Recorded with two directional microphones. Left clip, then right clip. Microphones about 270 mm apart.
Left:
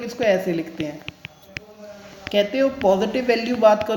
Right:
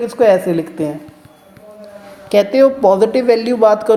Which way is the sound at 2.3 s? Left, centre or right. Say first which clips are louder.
Right 9 dB; centre.